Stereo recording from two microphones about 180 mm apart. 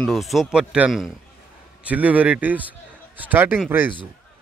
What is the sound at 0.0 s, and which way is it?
Speech, centre (ahead or behind).